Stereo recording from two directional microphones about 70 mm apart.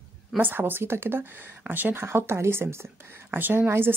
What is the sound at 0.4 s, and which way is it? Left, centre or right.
Speech, right.